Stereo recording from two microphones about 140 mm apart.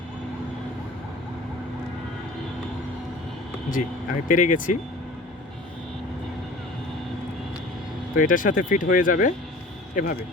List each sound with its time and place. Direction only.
4.3 s speech: 70° left (ahead or behind)
8.1 s speech: 75° left (ahead or behind)